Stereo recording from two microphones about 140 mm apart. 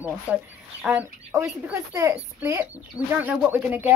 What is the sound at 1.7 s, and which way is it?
A woman's voice, 20° right (ahead or behind).